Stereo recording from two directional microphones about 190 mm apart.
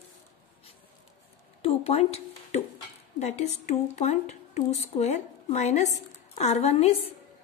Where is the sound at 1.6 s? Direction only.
30° left (ahead or behind).